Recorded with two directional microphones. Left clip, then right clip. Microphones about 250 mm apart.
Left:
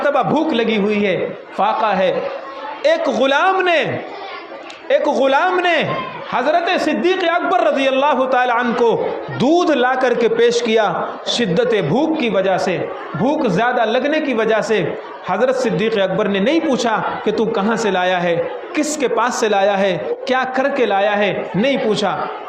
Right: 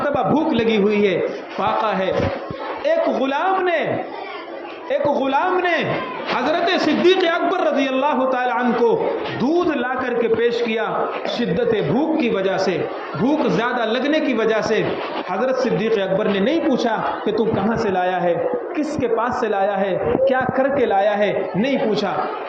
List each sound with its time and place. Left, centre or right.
0.0 s a man's voice: left
4.9 s a man's voice: left